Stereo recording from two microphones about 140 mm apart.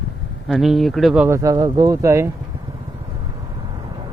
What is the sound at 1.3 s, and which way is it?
Speech, 25° right (ahead or behind).